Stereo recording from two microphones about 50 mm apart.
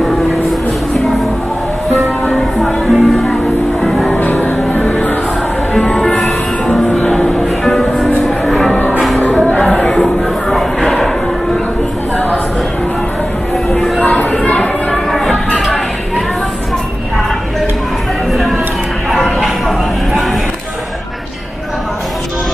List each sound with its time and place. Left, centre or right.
2.2 s music: centre
4.1 s music: left
5.9 s music: centre
6.1 s music: centre
6.7 s music: centre
9.8 s a sound: centre
13.7 s a sound: centre
14.5 s a sound: centre
15.0 s music: centre